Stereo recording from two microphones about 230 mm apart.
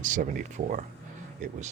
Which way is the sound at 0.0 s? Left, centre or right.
Right.